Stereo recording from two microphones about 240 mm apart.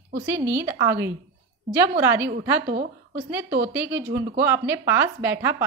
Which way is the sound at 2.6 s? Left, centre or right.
Right.